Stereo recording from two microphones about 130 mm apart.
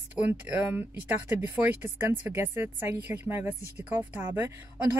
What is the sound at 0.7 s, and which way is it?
Speech, 15° right (ahead or behind).